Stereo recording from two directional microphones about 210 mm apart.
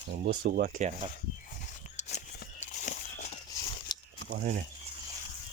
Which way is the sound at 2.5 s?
35° left (ahead or behind).